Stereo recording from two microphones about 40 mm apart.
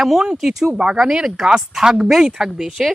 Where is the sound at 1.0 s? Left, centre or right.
Centre.